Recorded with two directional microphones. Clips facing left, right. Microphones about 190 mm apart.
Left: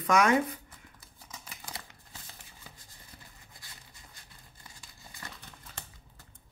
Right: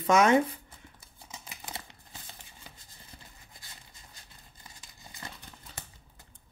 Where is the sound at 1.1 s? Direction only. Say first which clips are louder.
Right 2 dB; 25° right (ahead or behind).